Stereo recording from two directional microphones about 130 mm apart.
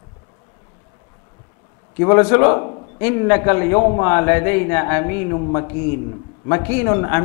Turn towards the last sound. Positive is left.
turn(degrees=25)  # may be behind; listen again after turning